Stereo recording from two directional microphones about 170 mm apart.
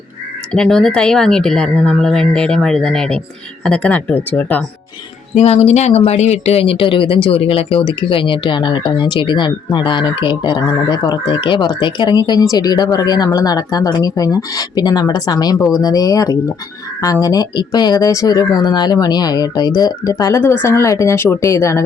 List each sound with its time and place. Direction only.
0.5 s a woman's voice: 5° left (ahead or behind)
5.3 s speech: 40° left (ahead or behind); by 21.8 s 15° left (ahead or behind)